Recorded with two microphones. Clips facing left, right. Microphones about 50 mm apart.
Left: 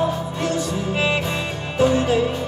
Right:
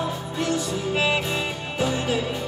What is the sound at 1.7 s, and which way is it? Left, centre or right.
Music, left.